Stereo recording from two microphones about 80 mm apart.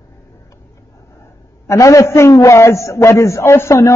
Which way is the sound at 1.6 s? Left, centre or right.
Left.